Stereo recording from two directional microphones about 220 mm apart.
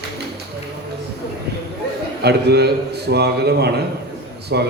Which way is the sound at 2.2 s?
50° right (ahead or behind).